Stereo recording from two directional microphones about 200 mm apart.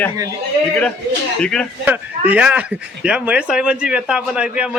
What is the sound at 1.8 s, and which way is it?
Speech, 10° right (ahead or behind).